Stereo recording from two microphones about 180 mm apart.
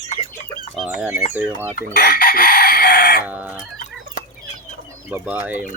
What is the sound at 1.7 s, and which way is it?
Chicken, 55° left (ahead or behind).